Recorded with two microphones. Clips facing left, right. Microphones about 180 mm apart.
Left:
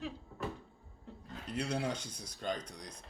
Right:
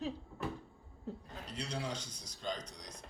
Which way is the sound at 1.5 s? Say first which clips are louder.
Left 5 dB; 55° left (ahead or behind).